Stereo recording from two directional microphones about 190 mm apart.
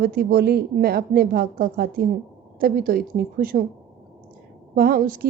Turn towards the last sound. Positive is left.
turn(degrees=-45)  # may be behind; listen again after turning